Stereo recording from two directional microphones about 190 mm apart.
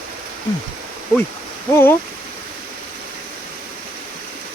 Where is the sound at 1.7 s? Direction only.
15° left (ahead or behind).